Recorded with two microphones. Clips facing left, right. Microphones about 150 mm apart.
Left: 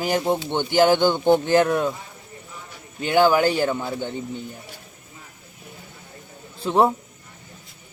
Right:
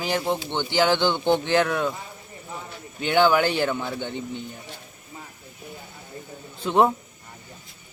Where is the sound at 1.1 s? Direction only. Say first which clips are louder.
Left 4 dB; 10° left (ahead or behind).